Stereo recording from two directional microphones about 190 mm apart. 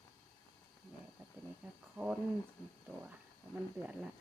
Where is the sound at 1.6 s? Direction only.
5° right (ahead or behind).